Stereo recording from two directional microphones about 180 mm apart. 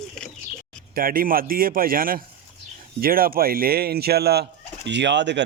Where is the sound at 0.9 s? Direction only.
55° right (ahead or behind).